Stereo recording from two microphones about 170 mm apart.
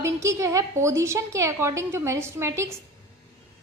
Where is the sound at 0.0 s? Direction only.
15° right (ahead or behind).